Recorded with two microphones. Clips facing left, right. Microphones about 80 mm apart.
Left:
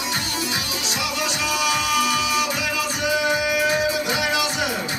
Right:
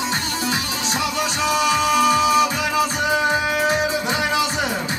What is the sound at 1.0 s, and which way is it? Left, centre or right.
Music, right.